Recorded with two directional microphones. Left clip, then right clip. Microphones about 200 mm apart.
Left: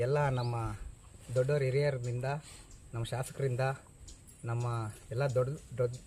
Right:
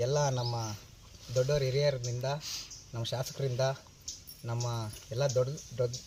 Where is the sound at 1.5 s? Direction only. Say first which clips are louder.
Even; 30° left (ahead or behind).